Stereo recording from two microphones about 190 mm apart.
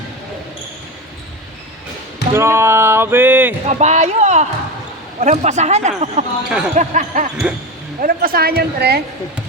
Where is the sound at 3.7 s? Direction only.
35° right (ahead or behind); by 9.0 s 55° right (ahead or behind).